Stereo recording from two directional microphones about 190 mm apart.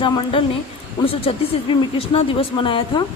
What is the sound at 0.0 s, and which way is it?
A woman's voice, 25° left (ahead or behind).